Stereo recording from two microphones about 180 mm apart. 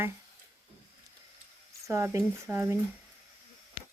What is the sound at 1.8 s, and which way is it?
Speech, 15° right (ahead or behind).